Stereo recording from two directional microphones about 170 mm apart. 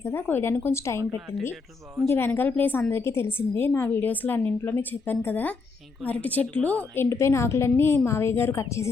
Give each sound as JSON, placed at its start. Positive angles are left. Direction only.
{"t": 0.0, "sound": "a woman's voice", "side_deg": 15}
{"t": 2.0, "sound": "a woman's voice", "side_deg": 15}